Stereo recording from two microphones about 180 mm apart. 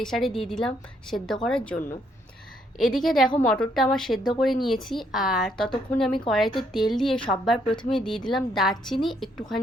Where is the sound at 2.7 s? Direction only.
Centre (ahead or behind).